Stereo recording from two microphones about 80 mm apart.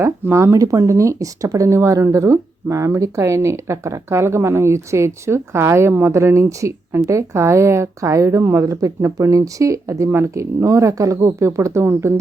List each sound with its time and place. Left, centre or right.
0.0 s speech: right